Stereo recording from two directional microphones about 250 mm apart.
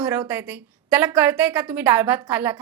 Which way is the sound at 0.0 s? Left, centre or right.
Centre.